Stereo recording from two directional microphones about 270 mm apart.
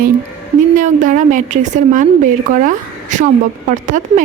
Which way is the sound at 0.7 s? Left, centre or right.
Right.